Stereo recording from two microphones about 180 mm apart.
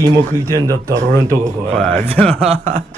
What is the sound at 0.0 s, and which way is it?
Speech, 20° right (ahead or behind).